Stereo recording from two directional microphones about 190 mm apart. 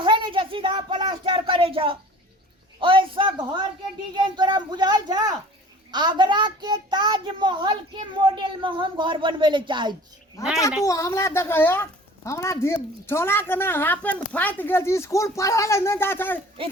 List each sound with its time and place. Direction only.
0.0 s a sound: 25° right (ahead or behind)
4.4 s a child's voice: 25° right (ahead or behind)
10.4 s a woman's voice: 15° left (ahead or behind)